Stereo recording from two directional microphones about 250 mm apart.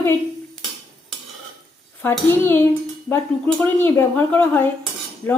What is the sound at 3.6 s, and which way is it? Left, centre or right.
Speech, centre.